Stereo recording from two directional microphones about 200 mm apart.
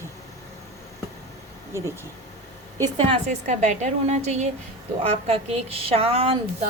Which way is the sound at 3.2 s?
35° right (ahead or behind).